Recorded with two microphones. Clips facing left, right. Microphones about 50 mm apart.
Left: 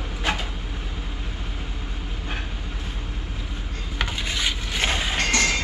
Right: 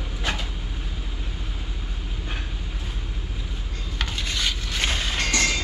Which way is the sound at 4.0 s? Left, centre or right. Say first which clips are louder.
Left 2 dB; centre.